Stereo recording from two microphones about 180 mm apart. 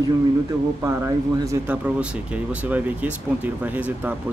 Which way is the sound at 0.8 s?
15° right (ahead or behind).